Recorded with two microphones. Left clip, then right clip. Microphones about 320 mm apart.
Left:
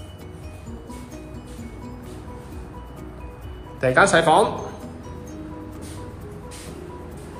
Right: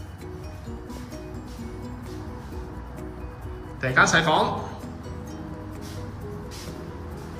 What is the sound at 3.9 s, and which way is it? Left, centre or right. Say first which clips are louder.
Speech: left 3 dB; centre.